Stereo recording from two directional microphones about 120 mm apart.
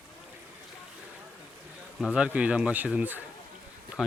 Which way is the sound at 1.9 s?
5° right (ahead or behind).